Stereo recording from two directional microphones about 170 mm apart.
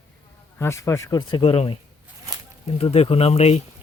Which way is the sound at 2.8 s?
35° left (ahead or behind).